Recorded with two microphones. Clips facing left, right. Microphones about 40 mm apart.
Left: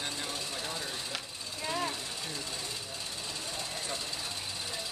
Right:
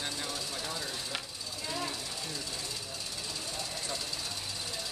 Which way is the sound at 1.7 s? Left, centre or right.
Left.